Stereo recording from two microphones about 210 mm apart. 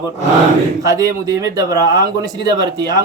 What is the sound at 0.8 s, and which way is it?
Speech, 15° right (ahead or behind).